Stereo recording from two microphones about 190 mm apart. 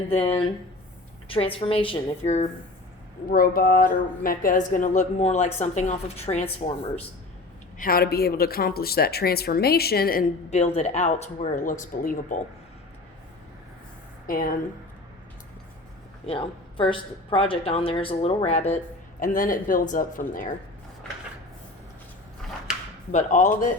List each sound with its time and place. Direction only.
0.1 s a woman's voice: 30° left (ahead or behind)
3.2 s speech: 50° left (ahead or behind); by 6.5 s 35° left (ahead or behind)
7.8 s speech: 50° left (ahead or behind)
10.8 s speech: 35° left (ahead or behind)
14.3 s speech: 50° left (ahead or behind)
16.2 s a woman's voice: 30° left (ahead or behind)
19.2 s speech: 45° left (ahead or behind)
23.1 s speech: 40° left (ahead or behind)